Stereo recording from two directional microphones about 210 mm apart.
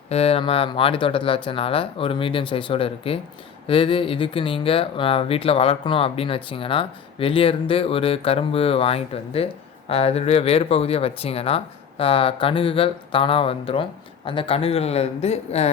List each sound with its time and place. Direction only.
0.1 s speech: 30° left (ahead or behind)